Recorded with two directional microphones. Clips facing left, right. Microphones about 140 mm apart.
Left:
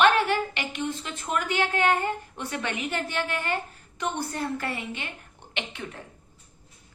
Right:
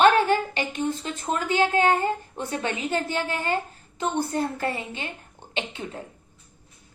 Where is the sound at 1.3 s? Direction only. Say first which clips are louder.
Right 4 dB; 25° right (ahead or behind).